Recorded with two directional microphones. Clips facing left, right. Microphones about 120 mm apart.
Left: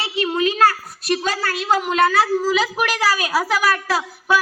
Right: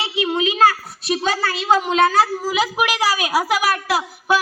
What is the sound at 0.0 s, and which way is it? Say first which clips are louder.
Speech: even; 15° right (ahead or behind).